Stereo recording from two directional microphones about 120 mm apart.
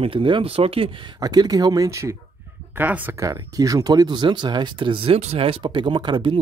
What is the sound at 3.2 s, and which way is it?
Speech, 30° right (ahead or behind).